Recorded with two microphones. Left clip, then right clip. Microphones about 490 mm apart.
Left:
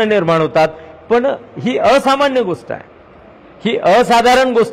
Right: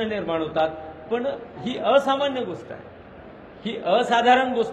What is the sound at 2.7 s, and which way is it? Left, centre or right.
Speech, left.